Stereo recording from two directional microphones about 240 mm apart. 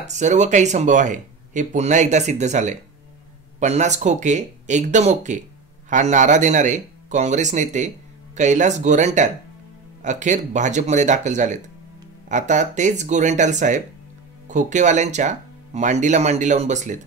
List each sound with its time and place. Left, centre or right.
0.0 s speech: right